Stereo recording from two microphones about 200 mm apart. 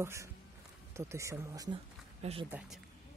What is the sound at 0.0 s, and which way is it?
Speech, 15° right (ahead or behind).